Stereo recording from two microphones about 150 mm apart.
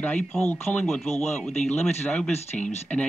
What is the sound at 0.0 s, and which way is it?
Speech, 5° left (ahead or behind).